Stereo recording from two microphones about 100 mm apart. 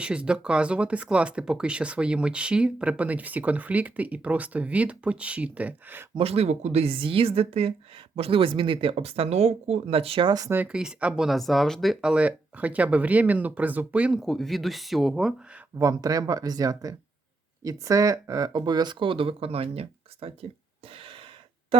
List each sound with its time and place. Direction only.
0.0 s speech: 10° right (ahead or behind)
6.1 s speech: 85° right
10.2 s speech: 40° right (ahead or behind)
10.7 s speech: 10° right (ahead or behind)
12.0 s speech: 15° right (ahead or behind)
14.2 s speech: centre (ahead or behind)
15.8 s speech: 35° right (ahead or behind); by 20.5 s 75° right (ahead or behind)
20.9 s gasp: 65° right (ahead or behind)